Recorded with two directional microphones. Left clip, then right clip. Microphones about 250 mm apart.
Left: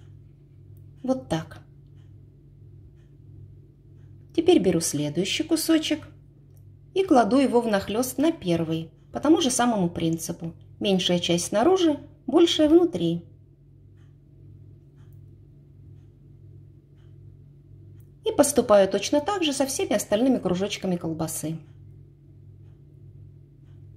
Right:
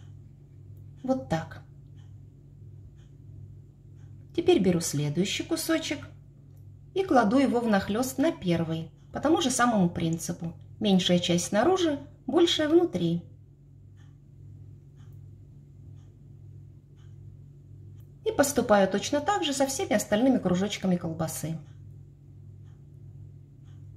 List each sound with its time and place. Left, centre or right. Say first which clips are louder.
1.0 s a woman's voice: left 2 dB; centre
4.4 s a woman's voice: left 4 dB; centre
7.0 s a woman's voice: left 4 dB; centre
18.2 s a woman's voice: left 4 dB; centre